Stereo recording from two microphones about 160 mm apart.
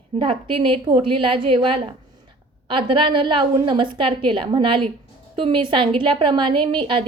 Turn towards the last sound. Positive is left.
turn(degrees=-30)  # may be behind; listen again after turning